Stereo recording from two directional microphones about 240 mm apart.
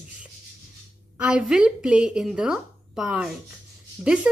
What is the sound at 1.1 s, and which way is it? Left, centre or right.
Speech, centre.